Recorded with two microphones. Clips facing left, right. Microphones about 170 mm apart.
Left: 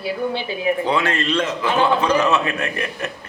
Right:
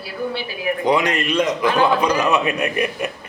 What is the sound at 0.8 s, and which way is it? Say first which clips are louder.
A man's voice: right 2 dB; 15° right (ahead or behind).